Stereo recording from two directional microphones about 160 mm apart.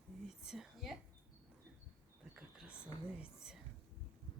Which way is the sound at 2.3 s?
5° right (ahead or behind).